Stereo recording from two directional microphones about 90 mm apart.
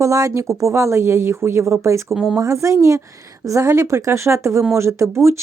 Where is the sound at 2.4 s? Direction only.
35° right (ahead or behind).